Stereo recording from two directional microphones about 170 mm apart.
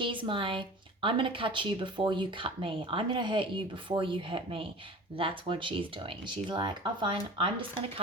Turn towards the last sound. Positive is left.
turn(degrees=-30)  # may be behind; listen again after turning